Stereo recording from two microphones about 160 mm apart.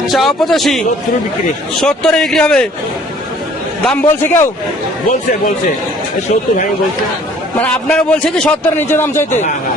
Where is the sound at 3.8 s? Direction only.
5° left (ahead or behind).